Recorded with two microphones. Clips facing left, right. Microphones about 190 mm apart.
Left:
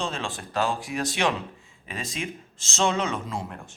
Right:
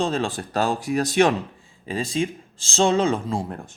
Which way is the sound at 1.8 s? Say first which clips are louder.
Right 9 dB; 30° right (ahead or behind).